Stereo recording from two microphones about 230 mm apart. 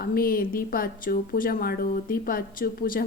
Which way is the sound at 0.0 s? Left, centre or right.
Left.